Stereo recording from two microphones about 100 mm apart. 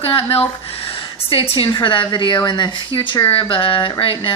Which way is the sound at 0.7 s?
70° left (ahead or behind).